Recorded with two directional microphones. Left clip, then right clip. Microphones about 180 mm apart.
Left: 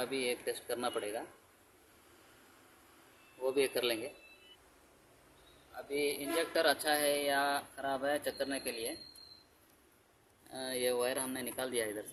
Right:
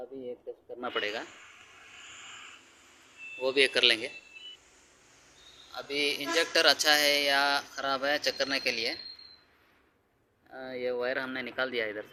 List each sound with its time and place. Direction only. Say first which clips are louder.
0.3 s speech: left 4 dB; 20° left (ahead or behind)
0.9 s speech: right 6 dB; 5° right (ahead or behind)
3.5 s speech: right 9 dB; 5° right (ahead or behind)
5.7 s speech: right 5 dB; 10° right (ahead or behind)
10.5 s speech: right 1 dB; 15° left (ahead or behind)